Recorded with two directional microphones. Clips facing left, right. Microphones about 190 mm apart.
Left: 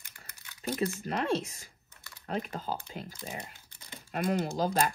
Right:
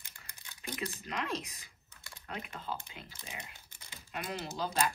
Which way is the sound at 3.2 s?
50° left (ahead or behind).